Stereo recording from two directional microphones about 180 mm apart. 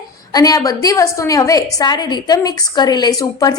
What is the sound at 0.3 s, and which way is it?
A woman's voice, 20° left (ahead or behind).